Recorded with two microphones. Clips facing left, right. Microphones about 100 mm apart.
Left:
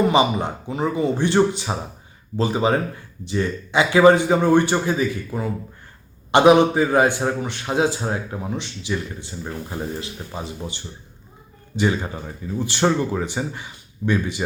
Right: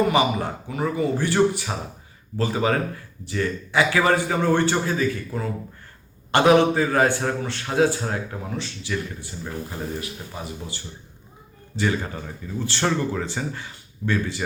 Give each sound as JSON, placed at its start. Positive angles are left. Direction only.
{"t": 0.1, "sound": "a man's voice", "side_deg": 25}